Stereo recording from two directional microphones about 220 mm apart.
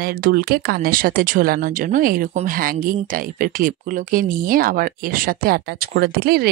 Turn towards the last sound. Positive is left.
turn(degrees=-45)  # may be behind; listen again after turning